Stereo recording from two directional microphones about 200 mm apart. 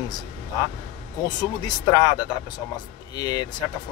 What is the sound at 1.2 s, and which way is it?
Speech, 20° left (ahead or behind).